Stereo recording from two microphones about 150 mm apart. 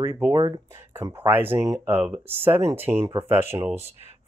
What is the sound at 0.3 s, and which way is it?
Speech, 25° right (ahead or behind).